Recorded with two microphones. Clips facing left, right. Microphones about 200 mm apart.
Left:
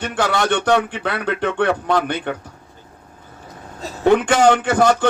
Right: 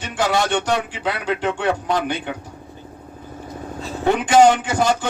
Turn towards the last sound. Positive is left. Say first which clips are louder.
# left 4 dB
turn(degrees=60)  # may be behind; listen again after turning